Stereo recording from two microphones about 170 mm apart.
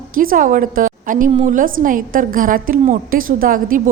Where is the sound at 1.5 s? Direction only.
50° right (ahead or behind).